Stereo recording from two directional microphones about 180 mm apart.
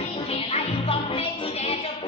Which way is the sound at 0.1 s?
35° left (ahead or behind).